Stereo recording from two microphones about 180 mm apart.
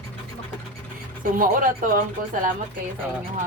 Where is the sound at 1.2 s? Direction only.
50° right (ahead or behind).